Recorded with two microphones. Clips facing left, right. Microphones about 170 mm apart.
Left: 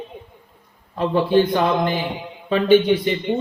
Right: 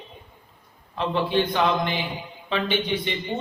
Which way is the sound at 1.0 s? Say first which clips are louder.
Left 6 dB; 45° left (ahead or behind).